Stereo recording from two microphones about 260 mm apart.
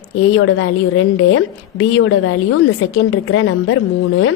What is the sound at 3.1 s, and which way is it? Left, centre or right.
Speech, left.